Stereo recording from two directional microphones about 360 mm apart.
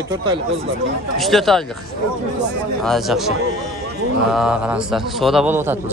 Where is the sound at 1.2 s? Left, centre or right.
Centre.